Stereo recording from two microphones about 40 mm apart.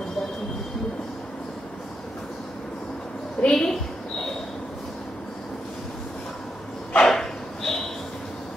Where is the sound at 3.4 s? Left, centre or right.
Left.